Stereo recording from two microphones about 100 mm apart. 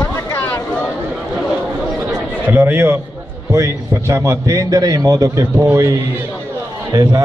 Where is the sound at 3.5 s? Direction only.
30° right (ahead or behind).